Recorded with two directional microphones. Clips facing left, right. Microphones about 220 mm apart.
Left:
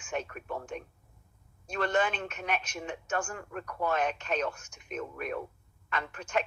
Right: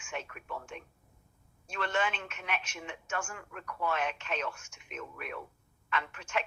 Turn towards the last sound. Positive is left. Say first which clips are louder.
# left 3 dB
turn(degrees=40)  # may be behind; listen again after turning